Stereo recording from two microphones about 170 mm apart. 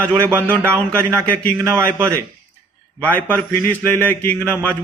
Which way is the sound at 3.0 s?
10° left (ahead or behind).